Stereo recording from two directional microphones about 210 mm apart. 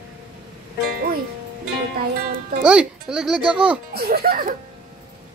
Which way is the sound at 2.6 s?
5° right (ahead or behind).